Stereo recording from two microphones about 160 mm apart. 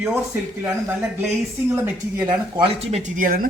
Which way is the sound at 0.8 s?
10° right (ahead or behind).